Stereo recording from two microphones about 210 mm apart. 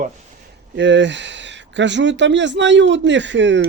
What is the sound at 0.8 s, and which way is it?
Speech, 55° right (ahead or behind).